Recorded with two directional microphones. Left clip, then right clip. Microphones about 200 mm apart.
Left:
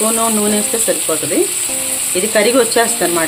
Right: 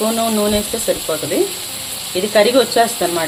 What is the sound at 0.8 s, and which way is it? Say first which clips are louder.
Speech: left 2 dB; 10° left (ahead or behind).